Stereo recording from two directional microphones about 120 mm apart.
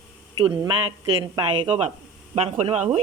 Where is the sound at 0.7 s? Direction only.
45° right (ahead or behind).